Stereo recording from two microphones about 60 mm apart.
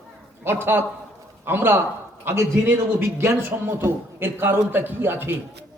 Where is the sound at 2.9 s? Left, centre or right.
Right.